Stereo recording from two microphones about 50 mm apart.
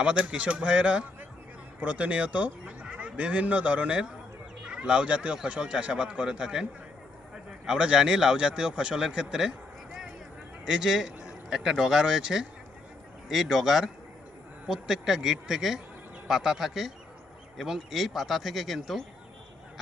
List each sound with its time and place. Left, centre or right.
0.0 s speech: right
10.7 s speech: centre